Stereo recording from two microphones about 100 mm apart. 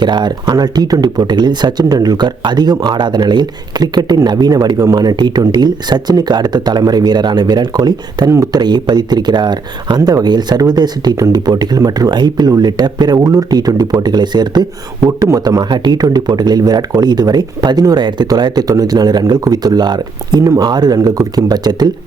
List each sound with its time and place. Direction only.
0.0 s speech: 50° right (ahead or behind); by 8.6 s 35° right (ahead or behind)
8.6 s speech: 45° right (ahead or behind)